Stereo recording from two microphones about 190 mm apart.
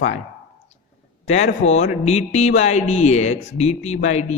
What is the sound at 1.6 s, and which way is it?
Speech, 35° left (ahead or behind).